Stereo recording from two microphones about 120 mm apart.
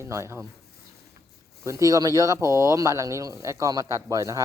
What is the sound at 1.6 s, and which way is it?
Speech, 25° right (ahead or behind).